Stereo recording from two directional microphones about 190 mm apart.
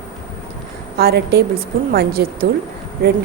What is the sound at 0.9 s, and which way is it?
Speech, 55° right (ahead or behind).